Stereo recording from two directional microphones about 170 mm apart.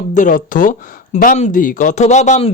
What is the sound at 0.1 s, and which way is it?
Speech, 50° left (ahead or behind).